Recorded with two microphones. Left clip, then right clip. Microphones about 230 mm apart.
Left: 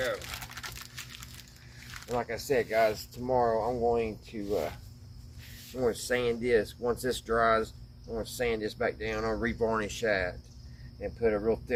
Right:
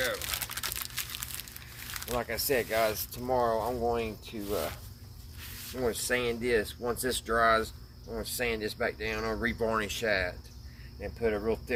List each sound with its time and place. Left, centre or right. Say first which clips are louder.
0.0 s crumpling: right 1 dB; right
1.9 s speech: even; right
5.7 s speech: left 1 dB; right